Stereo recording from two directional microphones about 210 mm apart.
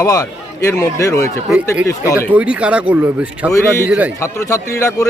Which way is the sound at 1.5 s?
5° right (ahead or behind).